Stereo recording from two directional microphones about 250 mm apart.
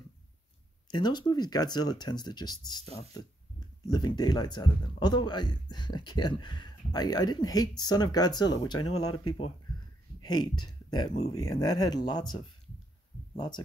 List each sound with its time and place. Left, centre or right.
0.8 s speech: centre
10.2 s speech: centre